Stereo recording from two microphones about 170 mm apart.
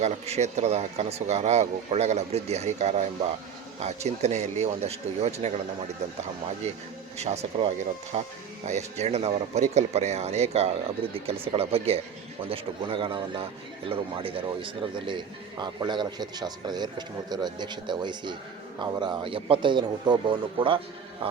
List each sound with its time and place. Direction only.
0.0 s speech: 40° right (ahead or behind)
7.2 s a man's voice: 40° right (ahead or behind)